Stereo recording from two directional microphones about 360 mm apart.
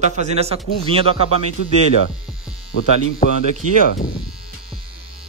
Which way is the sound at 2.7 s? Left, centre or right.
Left.